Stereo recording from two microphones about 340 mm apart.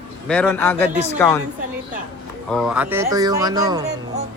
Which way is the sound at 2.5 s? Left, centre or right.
Centre.